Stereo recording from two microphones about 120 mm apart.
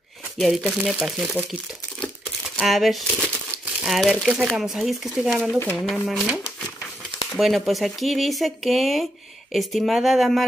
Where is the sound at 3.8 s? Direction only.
Centre (ahead or behind).